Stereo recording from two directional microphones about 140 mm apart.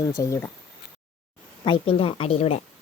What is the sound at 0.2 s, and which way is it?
Speech, 20° left (ahead or behind).